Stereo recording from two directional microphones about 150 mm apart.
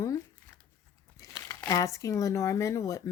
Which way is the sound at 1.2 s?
25° left (ahead or behind).